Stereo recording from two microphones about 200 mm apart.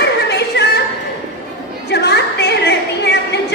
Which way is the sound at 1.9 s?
55° left (ahead or behind).